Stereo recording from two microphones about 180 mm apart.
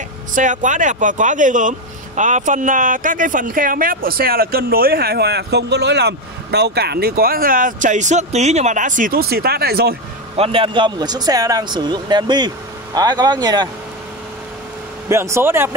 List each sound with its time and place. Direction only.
0.3 s speech: 45° right (ahead or behind); by 9.9 s 60° right (ahead or behind)
10.3 s speech: 30° right (ahead or behind)
15.0 s speech: 15° right (ahead or behind)